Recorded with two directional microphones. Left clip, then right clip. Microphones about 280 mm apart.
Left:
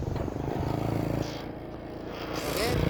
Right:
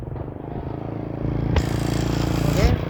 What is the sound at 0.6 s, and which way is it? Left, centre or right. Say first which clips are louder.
Vehicle: even; left.